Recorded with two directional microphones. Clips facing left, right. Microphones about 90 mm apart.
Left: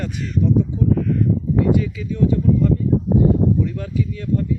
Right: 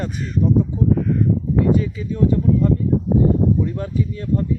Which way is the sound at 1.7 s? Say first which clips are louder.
Even; 35° right (ahead or behind).